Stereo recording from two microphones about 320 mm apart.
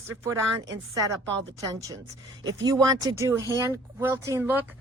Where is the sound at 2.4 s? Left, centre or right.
Centre.